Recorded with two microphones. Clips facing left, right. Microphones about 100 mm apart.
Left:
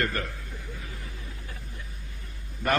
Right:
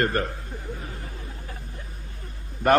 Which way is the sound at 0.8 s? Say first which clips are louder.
Right 4 dB; 40° right (ahead or behind).